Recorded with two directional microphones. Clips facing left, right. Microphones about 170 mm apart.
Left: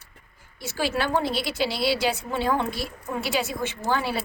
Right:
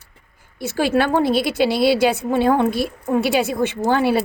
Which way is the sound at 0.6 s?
55° right (ahead or behind).